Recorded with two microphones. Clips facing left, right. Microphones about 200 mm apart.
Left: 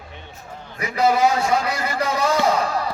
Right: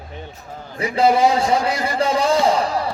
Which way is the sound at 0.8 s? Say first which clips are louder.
Right 3 dB; 30° right (ahead or behind).